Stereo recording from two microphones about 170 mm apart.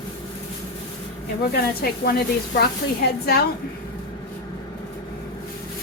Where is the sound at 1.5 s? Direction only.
65° left (ahead or behind).